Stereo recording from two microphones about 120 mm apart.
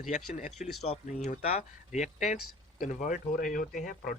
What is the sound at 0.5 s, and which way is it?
Speech, centre (ahead or behind).